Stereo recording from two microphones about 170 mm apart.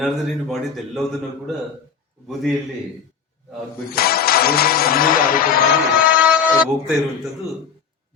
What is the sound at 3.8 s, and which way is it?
Speech, 65° left (ahead or behind).